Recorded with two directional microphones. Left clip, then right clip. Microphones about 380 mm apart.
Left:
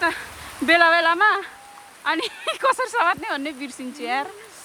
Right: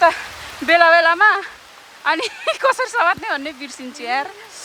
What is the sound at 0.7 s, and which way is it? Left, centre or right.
Speech, centre.